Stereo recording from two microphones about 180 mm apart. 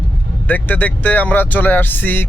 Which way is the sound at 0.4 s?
10° left (ahead or behind).